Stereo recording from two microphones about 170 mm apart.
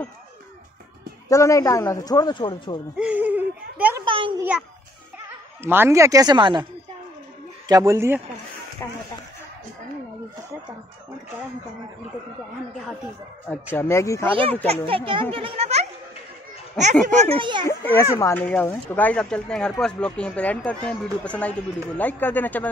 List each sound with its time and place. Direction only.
1.3 s a man's voice: 20° left (ahead or behind)
3.0 s a sound: 10° right (ahead or behind)
4.0 s a sound: 30° right (ahead or behind)
4.4 s speech: 5° right (ahead or behind); by 6.6 s 25° right (ahead or behind)
7.6 s speech: 20° right (ahead or behind)
8.8 s speech: 15° left (ahead or behind)
13.7 s speech: 15° left (ahead or behind)
14.3 s a child's voice: 30° right (ahead or behind)
17.2 s speech: 35° right (ahead or behind)
17.6 s speech: 15° left (ahead or behind)